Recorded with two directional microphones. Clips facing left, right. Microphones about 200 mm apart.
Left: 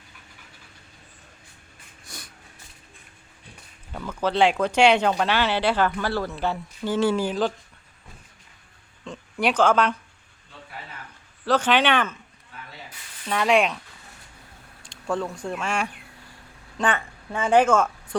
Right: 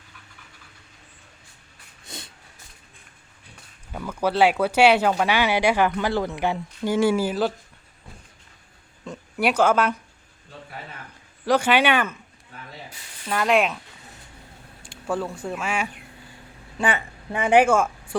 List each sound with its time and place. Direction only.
2.0 s a sound: 25° right (ahead or behind)
3.9 s speech: 10° right (ahead or behind)
9.0 s speech: 10° right (ahead or behind)
11.4 s speech: 10° right (ahead or behind)
13.2 s speech: centre (ahead or behind)
14.8 s a woman's voice: 5° right (ahead or behind)